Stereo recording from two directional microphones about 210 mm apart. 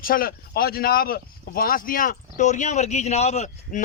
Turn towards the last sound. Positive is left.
turn(degrees=30)  # may be behind; listen again after turning